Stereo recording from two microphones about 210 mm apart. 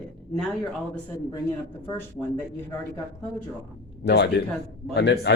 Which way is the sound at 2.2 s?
5° right (ahead or behind).